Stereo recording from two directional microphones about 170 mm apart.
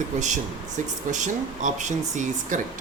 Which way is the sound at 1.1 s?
45° right (ahead or behind).